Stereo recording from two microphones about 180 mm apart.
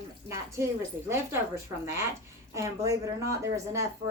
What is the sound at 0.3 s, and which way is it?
Speech, 15° right (ahead or behind).